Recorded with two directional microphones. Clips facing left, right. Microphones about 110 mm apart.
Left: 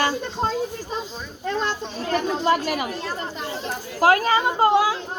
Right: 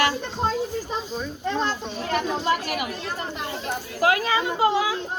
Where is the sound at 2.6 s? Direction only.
30° left (ahead or behind).